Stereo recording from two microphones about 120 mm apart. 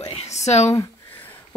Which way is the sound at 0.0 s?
60° left (ahead or behind).